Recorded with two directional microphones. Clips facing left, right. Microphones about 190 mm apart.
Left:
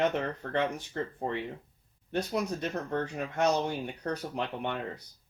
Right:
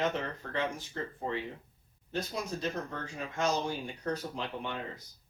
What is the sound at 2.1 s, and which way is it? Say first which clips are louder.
Speech: left 5 dB; 65° left (ahead or behind).